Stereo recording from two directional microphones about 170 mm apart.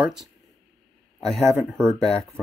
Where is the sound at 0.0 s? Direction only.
5° right (ahead or behind).